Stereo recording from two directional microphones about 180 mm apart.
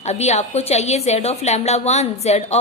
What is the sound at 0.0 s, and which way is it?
A woman's voice, 40° left (ahead or behind).